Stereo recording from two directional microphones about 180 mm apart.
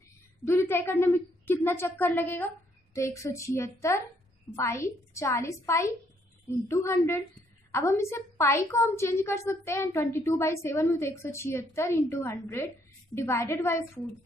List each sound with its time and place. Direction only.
0.5 s a woman's voice: 15° left (ahead or behind)